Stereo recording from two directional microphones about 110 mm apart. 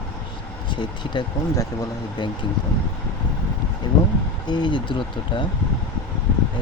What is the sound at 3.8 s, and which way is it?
Speech, 40° left (ahead or behind).